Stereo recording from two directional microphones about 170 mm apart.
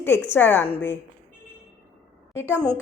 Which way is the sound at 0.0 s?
15° left (ahead or behind).